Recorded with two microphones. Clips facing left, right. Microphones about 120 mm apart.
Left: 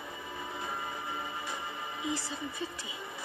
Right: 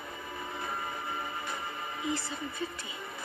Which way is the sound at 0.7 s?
50° right (ahead or behind).